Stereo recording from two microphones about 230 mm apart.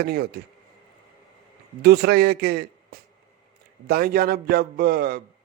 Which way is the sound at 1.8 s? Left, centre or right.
Right.